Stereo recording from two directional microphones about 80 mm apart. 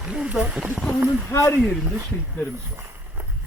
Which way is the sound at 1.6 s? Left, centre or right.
Centre.